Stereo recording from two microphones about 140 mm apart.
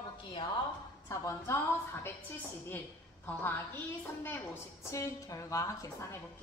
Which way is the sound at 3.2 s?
15° left (ahead or behind).